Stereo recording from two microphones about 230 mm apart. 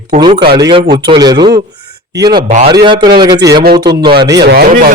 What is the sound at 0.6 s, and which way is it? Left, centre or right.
A man's voice, centre.